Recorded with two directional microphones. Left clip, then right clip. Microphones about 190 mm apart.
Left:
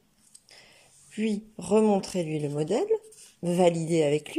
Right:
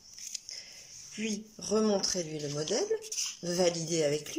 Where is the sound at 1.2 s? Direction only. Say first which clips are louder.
Left 6 dB; 20° left (ahead or behind).